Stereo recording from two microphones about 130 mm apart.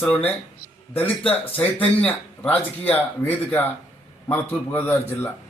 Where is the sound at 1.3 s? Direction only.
10° left (ahead or behind).